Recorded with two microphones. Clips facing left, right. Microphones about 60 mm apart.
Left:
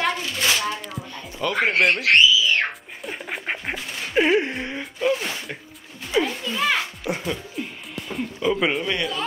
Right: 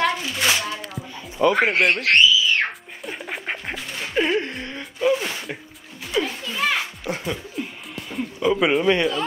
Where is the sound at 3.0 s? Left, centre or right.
Centre.